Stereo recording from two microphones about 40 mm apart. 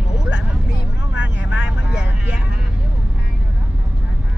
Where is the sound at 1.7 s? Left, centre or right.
Centre.